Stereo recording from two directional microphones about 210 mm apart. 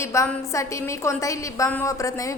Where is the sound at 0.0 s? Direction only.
15° left (ahead or behind).